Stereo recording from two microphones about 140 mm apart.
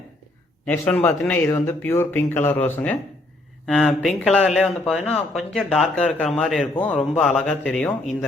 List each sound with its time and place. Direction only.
0.6 s a man's voice: 10° left (ahead or behind)
3.7 s speech: 5° left (ahead or behind)